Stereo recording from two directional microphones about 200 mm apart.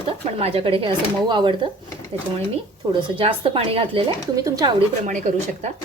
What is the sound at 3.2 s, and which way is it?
Speech, 30° right (ahead or behind).